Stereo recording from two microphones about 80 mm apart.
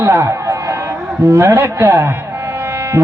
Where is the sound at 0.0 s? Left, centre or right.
Right.